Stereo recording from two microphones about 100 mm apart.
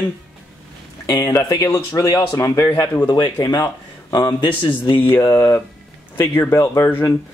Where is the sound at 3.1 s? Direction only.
45° left (ahead or behind).